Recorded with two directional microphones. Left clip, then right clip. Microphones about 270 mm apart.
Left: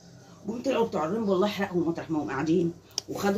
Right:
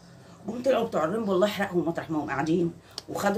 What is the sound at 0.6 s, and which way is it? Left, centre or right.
Speech, centre.